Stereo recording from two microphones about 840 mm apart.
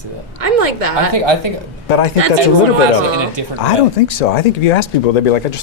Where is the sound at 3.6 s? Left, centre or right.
Left.